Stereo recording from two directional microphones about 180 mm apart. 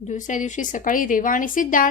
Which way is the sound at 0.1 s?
45° left (ahead or behind).